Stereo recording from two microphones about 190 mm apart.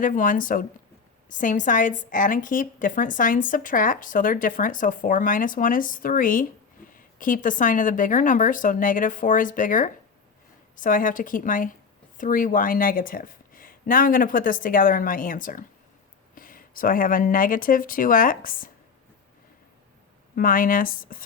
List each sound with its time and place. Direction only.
0.0 s a woman's voice: 45° left (ahead or behind)
20.3 s a woman's voice: 50° left (ahead or behind)